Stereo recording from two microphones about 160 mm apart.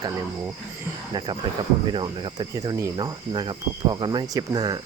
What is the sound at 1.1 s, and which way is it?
Cricket, 25° right (ahead or behind).